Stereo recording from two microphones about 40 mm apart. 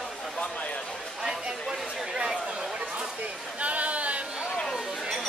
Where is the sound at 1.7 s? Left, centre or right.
Centre.